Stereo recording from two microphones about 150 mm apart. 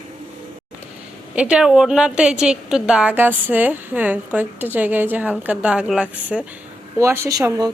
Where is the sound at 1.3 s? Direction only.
5° right (ahead or behind).